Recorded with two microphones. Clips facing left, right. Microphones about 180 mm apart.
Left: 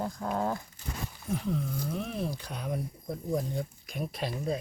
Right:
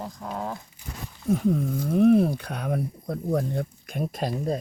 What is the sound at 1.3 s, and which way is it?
Speech, 50° right (ahead or behind).